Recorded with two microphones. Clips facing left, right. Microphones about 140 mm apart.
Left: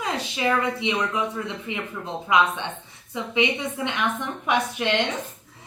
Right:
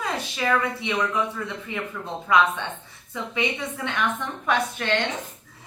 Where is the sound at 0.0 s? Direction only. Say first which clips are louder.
Left 1 dB; 20° left (ahead or behind).